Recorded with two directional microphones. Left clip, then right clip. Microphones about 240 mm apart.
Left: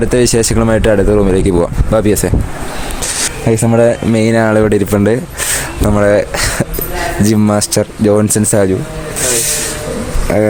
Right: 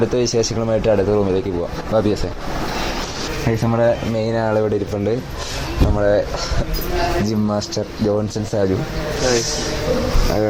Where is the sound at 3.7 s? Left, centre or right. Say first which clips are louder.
Left 6 dB; left.